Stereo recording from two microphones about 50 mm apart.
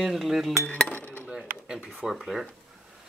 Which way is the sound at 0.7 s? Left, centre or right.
Left.